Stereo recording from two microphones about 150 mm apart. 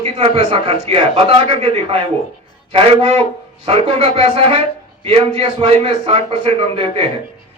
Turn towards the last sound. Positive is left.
turn(degrees=-40)  # may be behind; listen again after turning